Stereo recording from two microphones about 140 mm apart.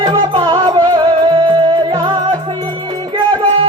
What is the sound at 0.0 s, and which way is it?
Music, 30° right (ahead or behind).